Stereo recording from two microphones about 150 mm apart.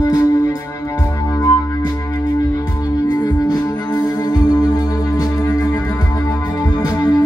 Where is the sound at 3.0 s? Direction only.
25° left (ahead or behind).